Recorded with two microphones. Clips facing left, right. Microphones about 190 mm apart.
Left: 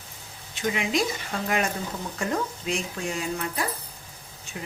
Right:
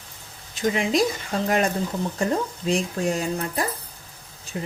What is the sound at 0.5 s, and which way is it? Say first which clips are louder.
A woman's voice: right 4 dB; 35° right (ahead or behind).